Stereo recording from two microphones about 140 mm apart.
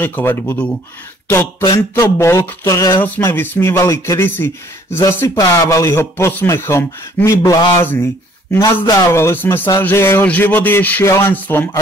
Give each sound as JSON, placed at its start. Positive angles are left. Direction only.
{"t": 0.0, "sound": "a man's voice", "side_deg": 15}